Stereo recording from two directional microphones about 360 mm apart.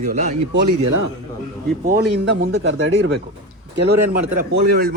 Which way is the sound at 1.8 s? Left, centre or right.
Right.